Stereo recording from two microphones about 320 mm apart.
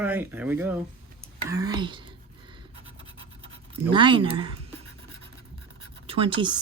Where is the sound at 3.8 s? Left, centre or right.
Centre.